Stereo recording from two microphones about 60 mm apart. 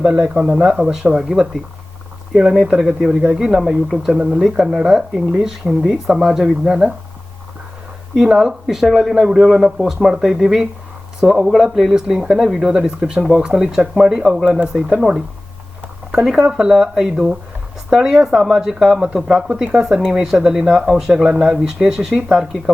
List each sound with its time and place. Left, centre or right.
0.1 s speech: centre
8.1 s speech: centre